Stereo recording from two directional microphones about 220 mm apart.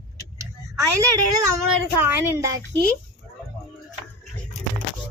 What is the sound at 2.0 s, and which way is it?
Speech, 10° right (ahead or behind).